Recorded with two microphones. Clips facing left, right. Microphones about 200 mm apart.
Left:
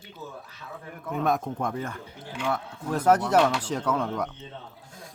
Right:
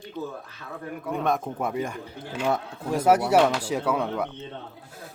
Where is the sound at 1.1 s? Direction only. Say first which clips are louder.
Even; centre (ahead or behind).